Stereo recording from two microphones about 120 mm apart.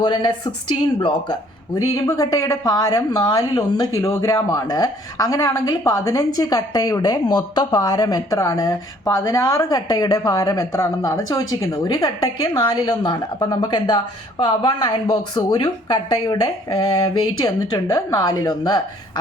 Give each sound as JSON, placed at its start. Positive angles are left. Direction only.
{"t": 0.0, "sound": "a woman's voice", "side_deg": 35}
{"t": 2.0, "sound": "a woman's voice", "side_deg": 30}